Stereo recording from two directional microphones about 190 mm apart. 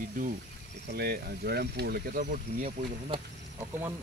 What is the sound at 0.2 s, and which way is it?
Speech, 45° right (ahead or behind).